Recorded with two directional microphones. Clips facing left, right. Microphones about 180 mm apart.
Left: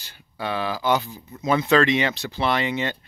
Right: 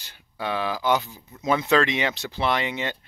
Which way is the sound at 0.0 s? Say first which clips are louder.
Left 1 dB; 15° right (ahead or behind).